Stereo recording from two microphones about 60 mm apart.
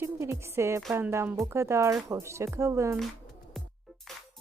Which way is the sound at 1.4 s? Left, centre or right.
Right.